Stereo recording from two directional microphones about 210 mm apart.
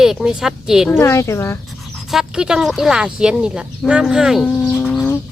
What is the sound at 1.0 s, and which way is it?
Speech, 15° left (ahead or behind).